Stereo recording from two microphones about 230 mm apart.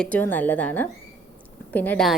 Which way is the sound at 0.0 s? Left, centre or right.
Centre.